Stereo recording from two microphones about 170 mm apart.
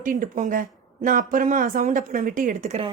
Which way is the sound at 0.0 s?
50° right (ahead or behind).